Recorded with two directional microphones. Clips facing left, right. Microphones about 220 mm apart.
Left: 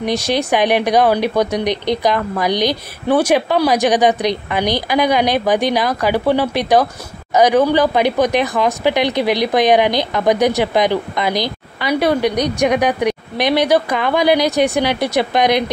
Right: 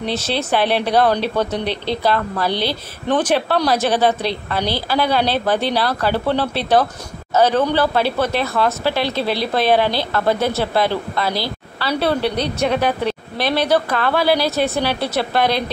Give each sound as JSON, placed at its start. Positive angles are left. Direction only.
{"t": 0.0, "sound": "speech", "side_deg": 15}